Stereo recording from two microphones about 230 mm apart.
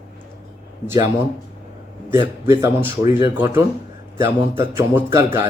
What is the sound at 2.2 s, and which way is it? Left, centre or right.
Speech, centre.